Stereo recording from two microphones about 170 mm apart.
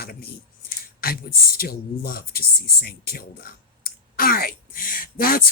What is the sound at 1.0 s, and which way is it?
Speech, 60° left (ahead or behind).